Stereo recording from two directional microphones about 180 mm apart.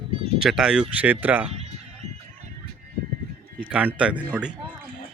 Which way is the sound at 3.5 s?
5° right (ahead or behind).